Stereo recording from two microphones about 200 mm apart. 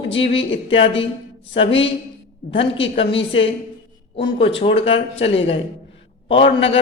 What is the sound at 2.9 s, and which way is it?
Speech, 25° left (ahead or behind).